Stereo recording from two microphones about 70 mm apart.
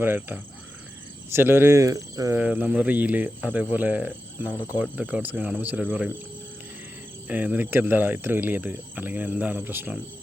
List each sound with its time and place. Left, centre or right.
0.0 s speech: right
2.6 s speech: centre
7.3 s speech: right